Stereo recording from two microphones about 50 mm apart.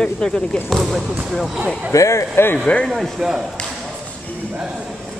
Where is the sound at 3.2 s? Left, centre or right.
Centre.